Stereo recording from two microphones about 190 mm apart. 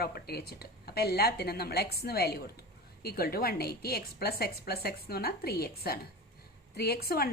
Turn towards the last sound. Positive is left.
turn(degrees=55)  # may be behind; listen again after turning